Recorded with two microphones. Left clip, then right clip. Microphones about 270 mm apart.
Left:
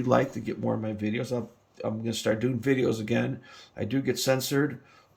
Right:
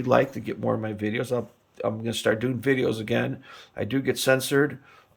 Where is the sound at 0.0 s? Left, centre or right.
Centre.